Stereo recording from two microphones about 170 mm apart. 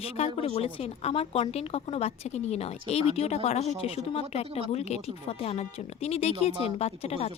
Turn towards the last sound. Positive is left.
turn(degrees=35)  # may be behind; listen again after turning